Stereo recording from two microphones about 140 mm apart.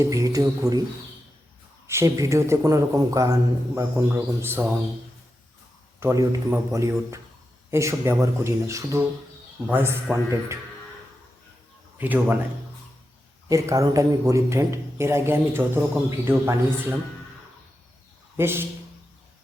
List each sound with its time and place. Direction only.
0.0 s speech: 25° right (ahead or behind)
1.9 s a man's voice: 20° right (ahead or behind)
6.0 s a man's voice: 20° right (ahead or behind)
11.9 s a man's voice: 15° right (ahead or behind)
13.5 s speech: 25° right (ahead or behind)
18.3 s a man's voice: 15° right (ahead or behind)